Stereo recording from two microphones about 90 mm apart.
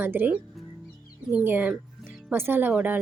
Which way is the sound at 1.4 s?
20° right (ahead or behind).